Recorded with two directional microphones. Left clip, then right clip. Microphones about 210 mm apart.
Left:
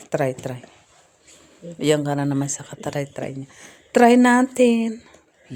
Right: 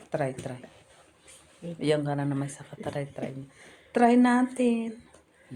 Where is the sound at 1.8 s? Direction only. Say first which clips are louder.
Left 7 dB; 55° left (ahead or behind).